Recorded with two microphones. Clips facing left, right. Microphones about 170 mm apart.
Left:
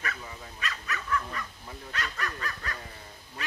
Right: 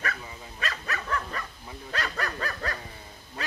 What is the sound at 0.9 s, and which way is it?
Dog, 50° right (ahead or behind).